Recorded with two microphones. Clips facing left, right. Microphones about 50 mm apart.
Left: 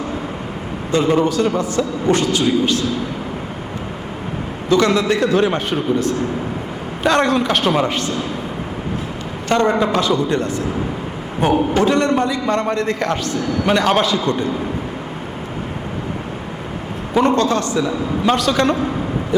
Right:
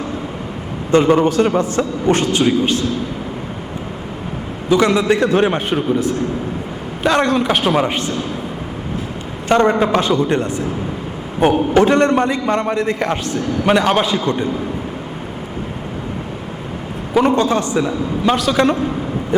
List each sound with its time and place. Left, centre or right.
0.9 s a man's voice: right
4.7 s a man's voice: centre
5.1 s a man's voice: right
7.0 s a man's voice: centre
7.4 s a man's voice: centre
9.5 s a man's voice: right
11.7 s a man's voice: right
12.5 s a man's voice: centre
14.3 s a man's voice: right
17.2 s a man's voice: centre
18.3 s a man's voice: centre